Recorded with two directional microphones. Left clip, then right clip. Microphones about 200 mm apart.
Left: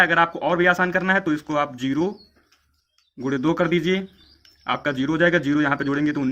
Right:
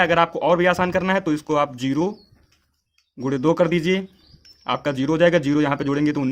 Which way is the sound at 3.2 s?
35° right (ahead or behind).